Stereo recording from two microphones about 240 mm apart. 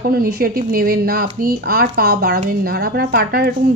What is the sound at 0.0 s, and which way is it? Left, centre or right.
Speech, right.